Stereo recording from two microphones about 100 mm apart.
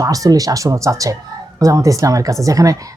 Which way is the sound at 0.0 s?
35° right (ahead or behind).